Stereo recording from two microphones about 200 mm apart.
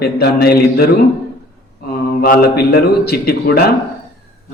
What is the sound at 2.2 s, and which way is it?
Speech, 50° left (ahead or behind).